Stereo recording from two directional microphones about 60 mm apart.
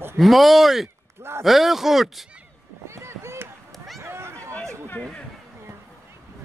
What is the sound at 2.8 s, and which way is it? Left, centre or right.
Run, right.